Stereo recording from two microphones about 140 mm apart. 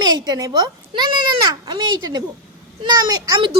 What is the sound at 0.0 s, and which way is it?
A child's voice, 30° right (ahead or behind).